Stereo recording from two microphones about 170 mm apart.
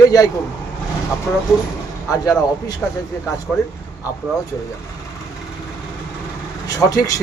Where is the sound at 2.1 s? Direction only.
20° left (ahead or behind).